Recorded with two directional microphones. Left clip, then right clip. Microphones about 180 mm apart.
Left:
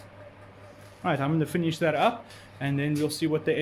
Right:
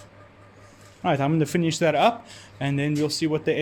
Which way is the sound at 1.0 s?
35° right (ahead or behind).